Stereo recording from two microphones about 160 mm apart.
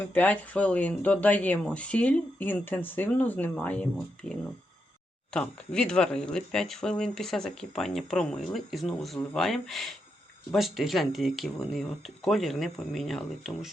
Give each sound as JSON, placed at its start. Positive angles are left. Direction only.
{"t": 0.1, "sound": "speech", "side_deg": 10}